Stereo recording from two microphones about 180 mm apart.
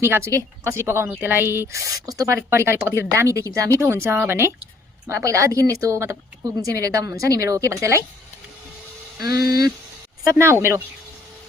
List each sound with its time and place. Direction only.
0.0 s a woman's voice: 15° right (ahead or behind)
9.2 s speech: 60° left (ahead or behind)
10.2 s a woman's voice: 15° right (ahead or behind)